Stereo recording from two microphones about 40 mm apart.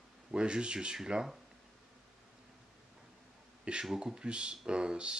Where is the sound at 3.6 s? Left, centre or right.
Right.